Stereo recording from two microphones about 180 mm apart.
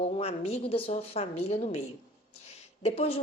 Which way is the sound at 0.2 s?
35° left (ahead or behind).